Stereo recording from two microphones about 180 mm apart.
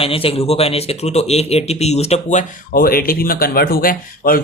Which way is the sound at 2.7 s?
55° left (ahead or behind).